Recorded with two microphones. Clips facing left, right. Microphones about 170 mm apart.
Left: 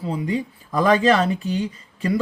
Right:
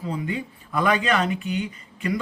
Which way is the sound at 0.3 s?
35° left (ahead or behind).